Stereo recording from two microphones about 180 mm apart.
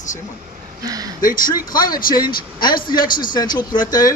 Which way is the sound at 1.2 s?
50° left (ahead or behind).